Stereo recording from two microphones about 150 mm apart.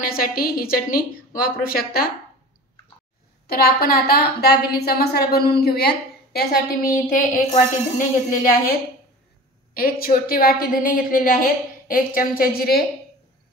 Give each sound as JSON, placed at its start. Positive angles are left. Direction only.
{"t": 0.0, "sound": "a woman's voice", "side_deg": 75}
{"t": 3.4, "sound": "a woman's voice", "side_deg": 85}
{"t": 9.8, "sound": "a woman's voice", "side_deg": 80}